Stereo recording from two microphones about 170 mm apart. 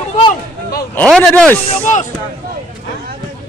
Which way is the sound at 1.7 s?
45° left (ahead or behind).